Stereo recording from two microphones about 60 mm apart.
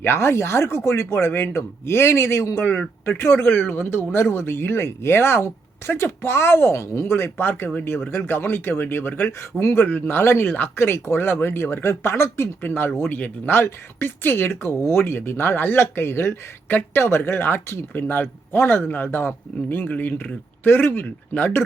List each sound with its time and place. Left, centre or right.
0.0 s a man's voice: left
9.8 s speech: left
10.8 s a man's voice: left
12.6 s speech: left
13.1 s a man's voice: left
13.5 s speech: left
18.7 s a man's voice: left